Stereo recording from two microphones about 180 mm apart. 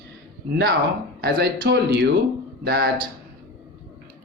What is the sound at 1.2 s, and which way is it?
A man's voice, 65° right (ahead or behind).